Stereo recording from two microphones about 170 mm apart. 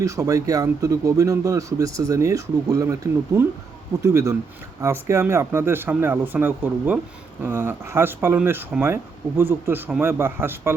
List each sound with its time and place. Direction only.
0.0 s speech: 20° right (ahead or behind)